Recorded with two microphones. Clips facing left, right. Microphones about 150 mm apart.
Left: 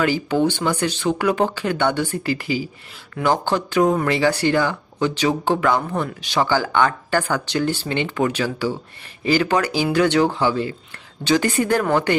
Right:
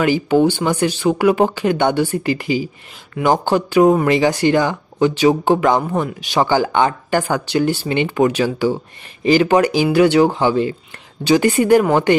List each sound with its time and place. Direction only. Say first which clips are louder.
0.0 s speech: right 5 dB; 15° right (ahead or behind)